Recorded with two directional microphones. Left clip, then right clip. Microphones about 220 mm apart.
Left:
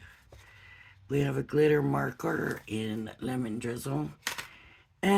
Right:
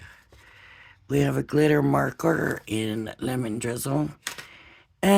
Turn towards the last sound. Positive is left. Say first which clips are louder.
# right 6 dB
turn(degrees=-45)  # may be behind; listen again after turning